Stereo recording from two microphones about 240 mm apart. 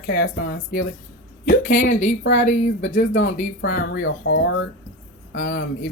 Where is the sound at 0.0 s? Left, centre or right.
Left.